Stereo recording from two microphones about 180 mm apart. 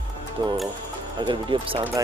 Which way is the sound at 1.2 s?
25° right (ahead or behind).